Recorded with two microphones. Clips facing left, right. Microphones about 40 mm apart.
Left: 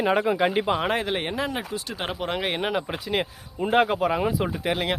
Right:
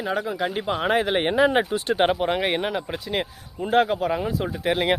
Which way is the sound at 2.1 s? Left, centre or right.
Centre.